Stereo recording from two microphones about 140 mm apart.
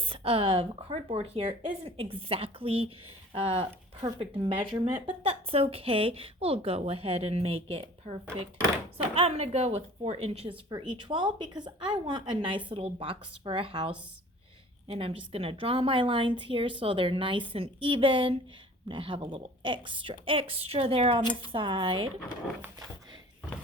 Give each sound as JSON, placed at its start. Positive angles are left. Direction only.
{"t": 0.0, "sound": "a woman's voice", "side_deg": -40}